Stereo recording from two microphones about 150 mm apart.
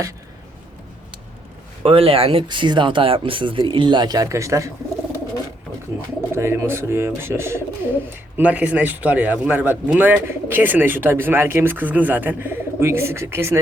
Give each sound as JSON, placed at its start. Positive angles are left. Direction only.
{"t": 1.8, "sound": "speech", "side_deg": -40}
{"t": 6.3, "sound": "speech", "side_deg": -15}